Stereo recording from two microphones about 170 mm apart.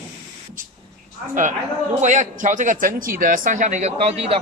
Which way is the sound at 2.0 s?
45° right (ahead or behind).